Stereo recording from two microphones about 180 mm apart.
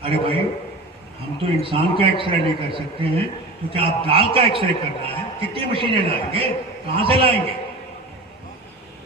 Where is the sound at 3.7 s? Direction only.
30° right (ahead or behind).